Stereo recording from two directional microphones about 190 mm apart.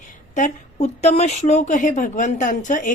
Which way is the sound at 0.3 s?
40° left (ahead or behind).